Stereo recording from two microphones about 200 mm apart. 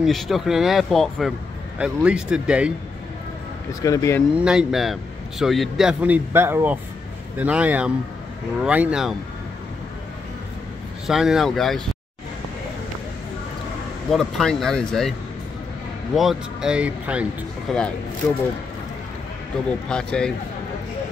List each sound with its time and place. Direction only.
0.0 s speech: centre (ahead or behind)
3.8 s speech: 15° left (ahead or behind)
4.4 s speech: 5° right (ahead or behind)
11.1 s speech: centre (ahead or behind)
14.1 s speech: centre (ahead or behind)
16.2 s speech: centre (ahead or behind)
19.9 s speech: 5° left (ahead or behind)